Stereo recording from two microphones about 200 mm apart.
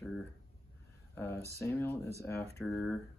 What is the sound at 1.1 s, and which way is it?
Speech, 10° left (ahead or behind).